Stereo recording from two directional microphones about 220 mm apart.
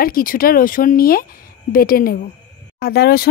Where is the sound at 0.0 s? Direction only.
40° left (ahead or behind).